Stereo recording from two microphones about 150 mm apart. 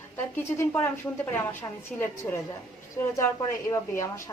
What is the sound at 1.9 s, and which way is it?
Speech, 5° left (ahead or behind).